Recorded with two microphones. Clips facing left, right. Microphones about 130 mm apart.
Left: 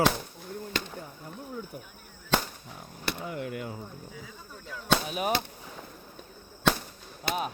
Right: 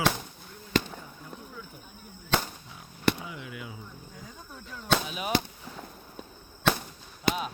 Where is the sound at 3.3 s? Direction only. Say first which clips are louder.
Left 6 dB; 50° left (ahead or behind).